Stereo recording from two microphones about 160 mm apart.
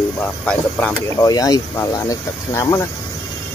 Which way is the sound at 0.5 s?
10° left (ahead or behind).